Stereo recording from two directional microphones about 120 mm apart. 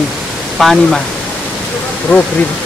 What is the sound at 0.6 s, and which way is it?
Speech, centre (ahead or behind).